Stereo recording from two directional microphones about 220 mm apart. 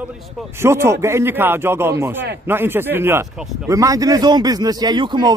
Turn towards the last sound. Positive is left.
turn(degrees=-20)  # may be behind; listen again after turning